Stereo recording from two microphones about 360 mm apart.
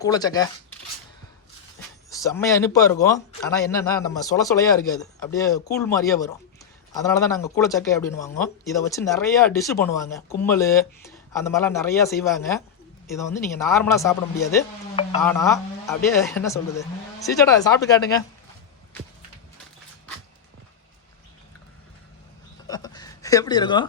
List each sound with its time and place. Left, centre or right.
0.0 s speech: centre
2.0 s speech: centre
22.6 s a sound: centre